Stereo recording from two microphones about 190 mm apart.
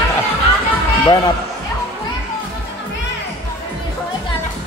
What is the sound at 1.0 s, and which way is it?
Speech, 20° left (ahead or behind).